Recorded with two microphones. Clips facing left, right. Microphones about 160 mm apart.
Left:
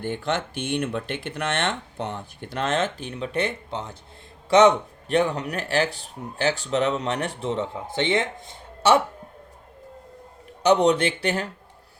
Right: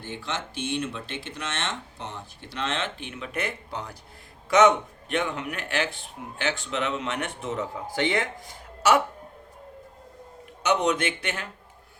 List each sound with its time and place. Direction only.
0.0 s speech: 55° left (ahead or behind); by 9.0 s 25° left (ahead or behind)
10.6 s speech: 35° left (ahead or behind)